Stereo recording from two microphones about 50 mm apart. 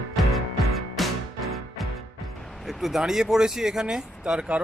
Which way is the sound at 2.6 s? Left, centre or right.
Centre.